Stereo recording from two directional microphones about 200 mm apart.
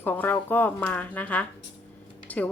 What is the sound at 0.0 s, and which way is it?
Speech, 10° left (ahead or behind).